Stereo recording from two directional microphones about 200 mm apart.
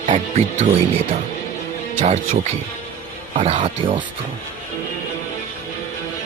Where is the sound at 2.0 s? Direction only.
35° right (ahead or behind).